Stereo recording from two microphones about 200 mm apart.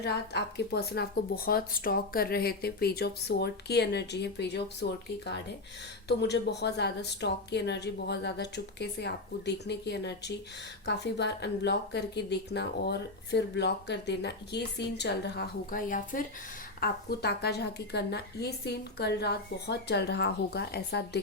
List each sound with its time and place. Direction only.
0.0 s a woman's voice: 55° left (ahead or behind)